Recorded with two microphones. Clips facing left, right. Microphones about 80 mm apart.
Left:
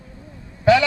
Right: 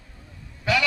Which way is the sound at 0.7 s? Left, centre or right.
Left.